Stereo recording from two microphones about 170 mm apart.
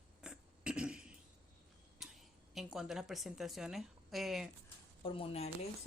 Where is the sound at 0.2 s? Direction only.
5° right (ahead or behind).